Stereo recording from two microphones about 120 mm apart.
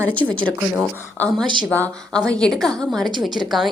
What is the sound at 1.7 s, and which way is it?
A woman's voice, 10° left (ahead or behind).